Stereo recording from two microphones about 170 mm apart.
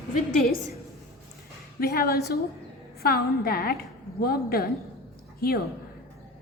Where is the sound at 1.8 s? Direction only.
65° left (ahead or behind).